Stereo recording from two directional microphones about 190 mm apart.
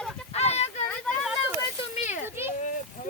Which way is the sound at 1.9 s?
40° left (ahead or behind).